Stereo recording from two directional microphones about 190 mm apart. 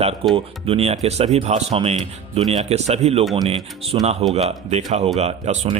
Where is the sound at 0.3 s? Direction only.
30° right (ahead or behind).